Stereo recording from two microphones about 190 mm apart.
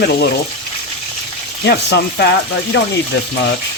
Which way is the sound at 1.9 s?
60° left (ahead or behind).